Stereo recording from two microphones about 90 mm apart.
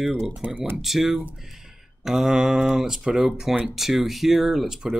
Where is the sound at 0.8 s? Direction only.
5° right (ahead or behind).